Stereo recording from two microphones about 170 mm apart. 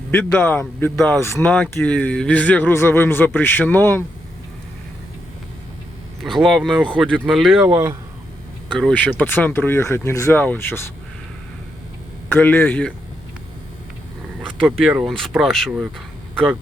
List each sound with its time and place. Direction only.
0.1 s speech: 10° left (ahead or behind)
6.2 s speech: centre (ahead or behind)
7.7 s speech: 15° right (ahead or behind)
8.8 s speech: 5° left (ahead or behind)
12.3 s speech: 10° left (ahead or behind)
14.8 s speech: centre (ahead or behind)